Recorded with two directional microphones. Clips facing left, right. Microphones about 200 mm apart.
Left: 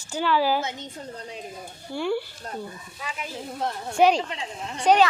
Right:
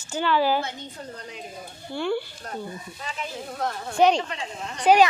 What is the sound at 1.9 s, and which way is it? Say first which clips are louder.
A woman's voice: even; 5° left (ahead or behind).